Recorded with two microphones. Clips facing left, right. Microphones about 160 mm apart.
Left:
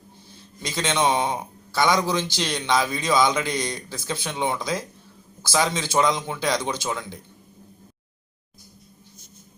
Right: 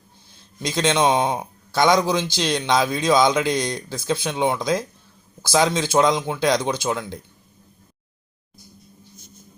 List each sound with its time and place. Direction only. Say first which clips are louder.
0.6 s a man's voice: right 4 dB; 15° right (ahead or behind)